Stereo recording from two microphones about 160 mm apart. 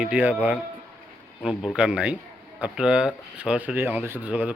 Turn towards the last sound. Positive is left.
turn(degrees=-10)  # may be behind; listen again after turning